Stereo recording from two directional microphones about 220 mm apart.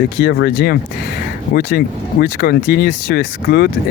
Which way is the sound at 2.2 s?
45° left (ahead or behind).